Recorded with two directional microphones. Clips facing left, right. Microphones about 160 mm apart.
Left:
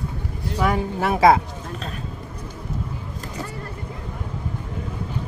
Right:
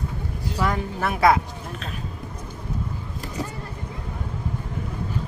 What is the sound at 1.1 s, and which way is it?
Speech, 25° left (ahead or behind).